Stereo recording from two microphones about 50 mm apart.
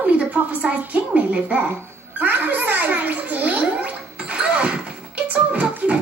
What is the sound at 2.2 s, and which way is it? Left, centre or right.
Gargling, right.